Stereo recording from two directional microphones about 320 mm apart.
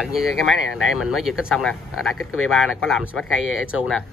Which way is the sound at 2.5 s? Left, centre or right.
Left.